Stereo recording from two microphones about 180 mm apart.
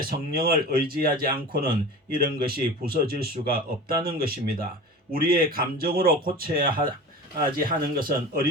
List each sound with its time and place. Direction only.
0.3 s speech: 55° right (ahead or behind)